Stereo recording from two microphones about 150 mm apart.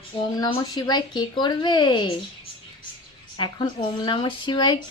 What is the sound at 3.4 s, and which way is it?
Speech, 30° left (ahead or behind).